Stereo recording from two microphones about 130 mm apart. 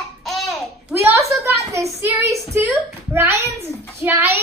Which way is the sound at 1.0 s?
20° right (ahead or behind).